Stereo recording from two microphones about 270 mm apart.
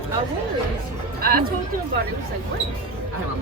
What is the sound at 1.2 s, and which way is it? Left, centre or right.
Speech, right.